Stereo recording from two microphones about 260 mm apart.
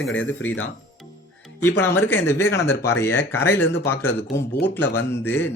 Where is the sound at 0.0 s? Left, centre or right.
Left.